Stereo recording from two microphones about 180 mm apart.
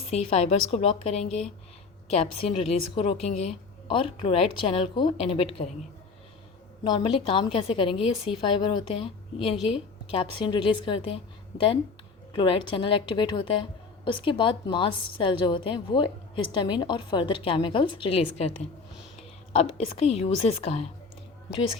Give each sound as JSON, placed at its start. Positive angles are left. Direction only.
{"t": 0.1, "sound": "speech", "side_deg": 35}
{"t": 6.8, "sound": "a woman's voice", "side_deg": 25}
{"t": 12.3, "sound": "a woman's voice", "side_deg": 25}